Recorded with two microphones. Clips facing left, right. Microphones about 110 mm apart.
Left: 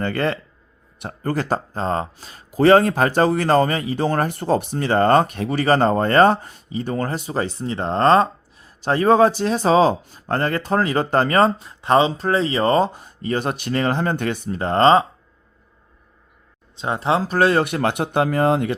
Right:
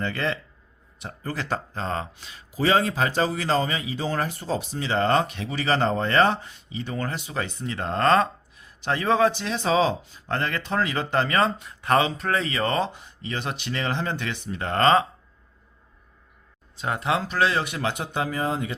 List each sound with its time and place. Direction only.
0.0 s speech: 50° left (ahead or behind); by 15.0 s 30° left (ahead or behind)
16.7 s speech: 25° left (ahead or behind); by 18.7 s 65° left (ahead or behind)